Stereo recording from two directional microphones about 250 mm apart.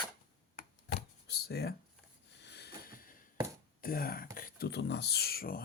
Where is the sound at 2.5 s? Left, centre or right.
Left.